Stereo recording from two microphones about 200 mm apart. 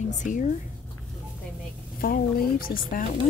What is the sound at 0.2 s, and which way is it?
Speech, 40° left (ahead or behind).